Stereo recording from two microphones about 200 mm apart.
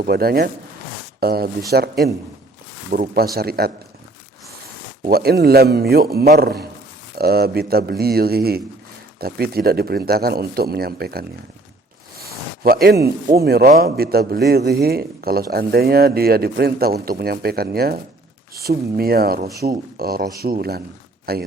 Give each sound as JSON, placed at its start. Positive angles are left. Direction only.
{"t": 0.0, "sound": "a man's voice", "side_deg": -50}
{"t": 5.0, "sound": "a man's voice", "side_deg": -50}